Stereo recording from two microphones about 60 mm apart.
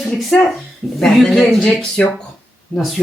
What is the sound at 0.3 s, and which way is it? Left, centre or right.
Speech, centre.